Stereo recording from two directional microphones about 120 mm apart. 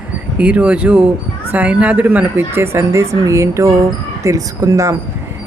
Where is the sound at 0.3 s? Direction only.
10° right (ahead or behind).